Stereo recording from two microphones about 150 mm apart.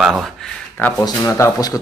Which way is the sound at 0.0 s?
Centre (ahead or behind).